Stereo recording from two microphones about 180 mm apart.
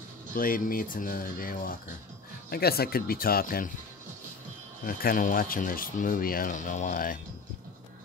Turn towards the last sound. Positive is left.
turn(degrees=50)  # may be behind; listen again after turning